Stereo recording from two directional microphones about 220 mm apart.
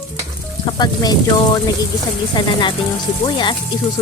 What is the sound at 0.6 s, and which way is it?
A woman's voice, 20° left (ahead or behind).